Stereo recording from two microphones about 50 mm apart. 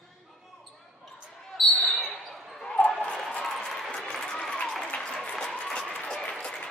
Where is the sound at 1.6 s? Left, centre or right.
Centre.